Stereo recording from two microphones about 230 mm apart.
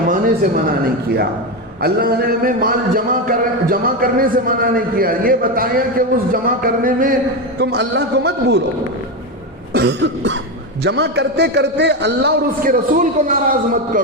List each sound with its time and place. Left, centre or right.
0.1 s a sound: right
1.8 s a man's voice: right
7.6 s a man's voice: right
9.7 s a man's voice: right